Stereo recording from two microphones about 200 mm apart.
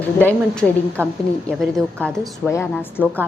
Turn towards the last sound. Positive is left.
turn(degrees=10)  # may be behind; listen again after turning